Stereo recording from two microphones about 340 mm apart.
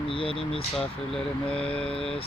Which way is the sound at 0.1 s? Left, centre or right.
Centre.